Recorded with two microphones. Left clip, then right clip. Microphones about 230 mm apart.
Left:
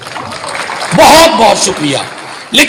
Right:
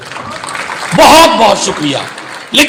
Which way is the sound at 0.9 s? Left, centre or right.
Left.